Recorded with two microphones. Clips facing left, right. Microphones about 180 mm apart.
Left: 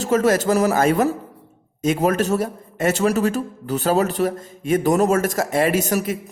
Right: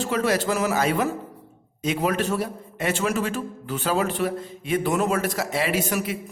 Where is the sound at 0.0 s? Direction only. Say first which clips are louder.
Left 5 dB; 45° left (ahead or behind).